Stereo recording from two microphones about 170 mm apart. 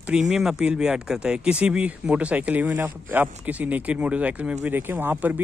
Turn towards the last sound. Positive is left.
turn(degrees=-10)  # may be behind; listen again after turning